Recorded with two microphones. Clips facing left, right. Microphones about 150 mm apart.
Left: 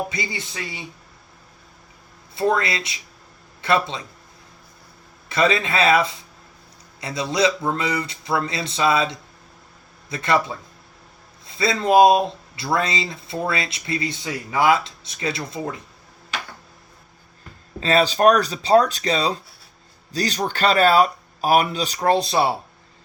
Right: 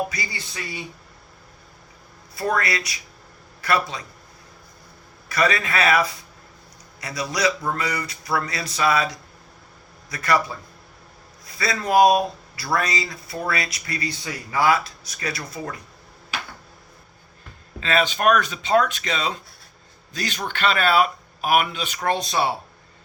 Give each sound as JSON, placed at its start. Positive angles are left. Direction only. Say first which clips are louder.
{"t": 0.1, "sound": "speech", "louder": "left 4 dB", "side_deg": 20}
{"t": 2.3, "sound": "speech", "louder": "left 3 dB", "side_deg": 25}
{"t": 5.3, "sound": "speech", "louder": "left 2 dB", "side_deg": 25}
{"t": 17.7, "sound": "speech", "louder": "left 4 dB", "side_deg": 35}